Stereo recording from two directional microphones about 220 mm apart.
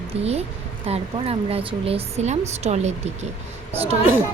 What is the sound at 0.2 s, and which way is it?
A woman's voice, 30° right (ahead or behind).